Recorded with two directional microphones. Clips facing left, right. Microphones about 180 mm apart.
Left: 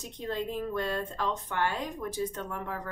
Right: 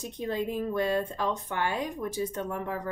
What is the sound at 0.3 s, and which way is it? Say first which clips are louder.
A woman's voice: right 2 dB; 15° right (ahead or behind).